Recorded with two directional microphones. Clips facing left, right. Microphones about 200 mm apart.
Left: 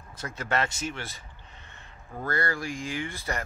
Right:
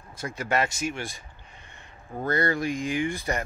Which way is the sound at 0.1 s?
10° right (ahead or behind).